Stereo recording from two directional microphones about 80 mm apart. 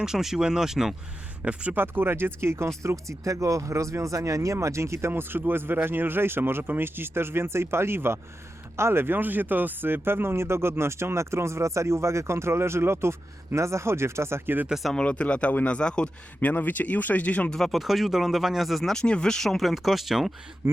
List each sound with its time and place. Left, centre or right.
0.0 s speech: centre
1.4 s speech: centre
14.7 s speech: centre
14.9 s speech: centre
17.6 s speech: centre